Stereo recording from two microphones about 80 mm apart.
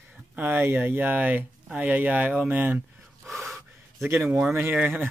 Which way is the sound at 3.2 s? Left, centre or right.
Centre.